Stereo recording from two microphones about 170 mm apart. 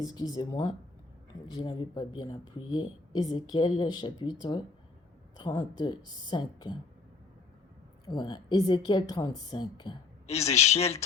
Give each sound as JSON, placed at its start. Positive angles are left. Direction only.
{"t": 0.0, "sound": "speech", "side_deg": 20}
{"t": 8.0, "sound": "speech", "side_deg": 25}
{"t": 10.2, "sound": "speech", "side_deg": 40}